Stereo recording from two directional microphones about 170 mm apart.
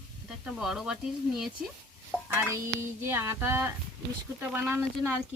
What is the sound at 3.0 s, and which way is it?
Speech, 15° right (ahead or behind).